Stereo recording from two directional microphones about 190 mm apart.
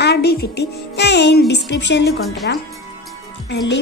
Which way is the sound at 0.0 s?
55° left (ahead or behind).